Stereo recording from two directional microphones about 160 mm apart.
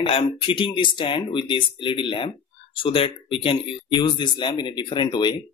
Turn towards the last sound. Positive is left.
turn(degrees=30)  # may be behind; listen again after turning